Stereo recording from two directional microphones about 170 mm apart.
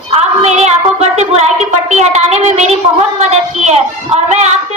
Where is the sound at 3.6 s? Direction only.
40° right (ahead or behind).